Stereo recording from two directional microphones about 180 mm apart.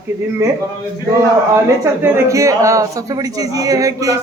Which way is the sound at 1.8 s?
15° right (ahead or behind).